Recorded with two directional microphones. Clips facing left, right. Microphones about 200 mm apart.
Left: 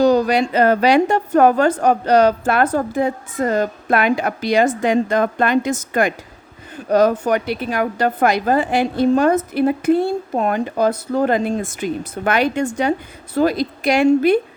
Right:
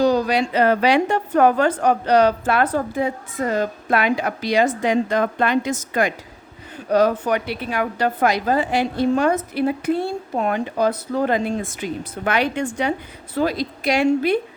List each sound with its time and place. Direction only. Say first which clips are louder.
0.0 s a woman's voice: left 3 dB; 50° left (ahead or behind)